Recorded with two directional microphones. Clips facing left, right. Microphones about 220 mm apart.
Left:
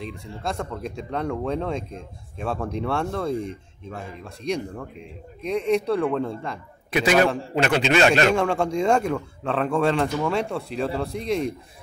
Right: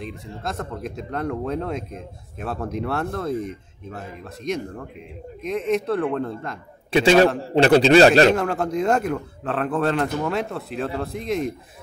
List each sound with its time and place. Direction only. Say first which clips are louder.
0.0 s speech: even; centre (ahead or behind)
5.4 s speech: left 1 dB; centre (ahead or behind)
6.9 s a man's voice: right 4 dB; 30° right (ahead or behind)
8.4 s speech: left 1 dB; 5° right (ahead or behind)